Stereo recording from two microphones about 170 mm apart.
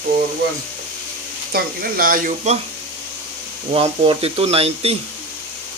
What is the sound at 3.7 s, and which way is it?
Speech, 30° right (ahead or behind).